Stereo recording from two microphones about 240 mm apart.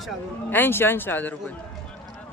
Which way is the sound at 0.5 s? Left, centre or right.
Centre.